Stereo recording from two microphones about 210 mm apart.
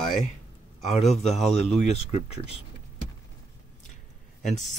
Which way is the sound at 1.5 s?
30° left (ahead or behind).